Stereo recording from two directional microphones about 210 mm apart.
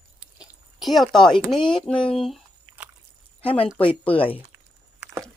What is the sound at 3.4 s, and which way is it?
Speech, 25° left (ahead or behind).